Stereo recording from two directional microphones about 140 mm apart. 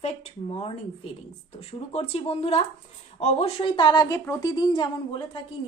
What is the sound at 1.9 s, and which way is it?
A woman's voice, 45° left (ahead or behind).